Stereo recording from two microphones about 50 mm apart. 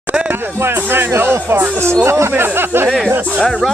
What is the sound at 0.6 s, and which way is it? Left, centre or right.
Speech, right.